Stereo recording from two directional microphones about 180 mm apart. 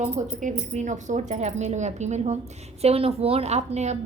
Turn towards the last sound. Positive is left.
turn(degrees=-40)  # may be behind; listen again after turning